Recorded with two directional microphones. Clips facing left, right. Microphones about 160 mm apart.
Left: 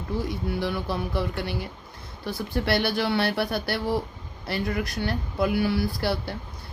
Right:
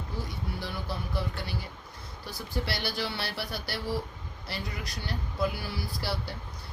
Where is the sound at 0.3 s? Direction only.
60° left (ahead or behind).